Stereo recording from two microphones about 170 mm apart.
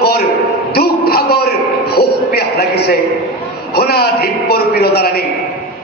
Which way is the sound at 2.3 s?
70° left (ahead or behind).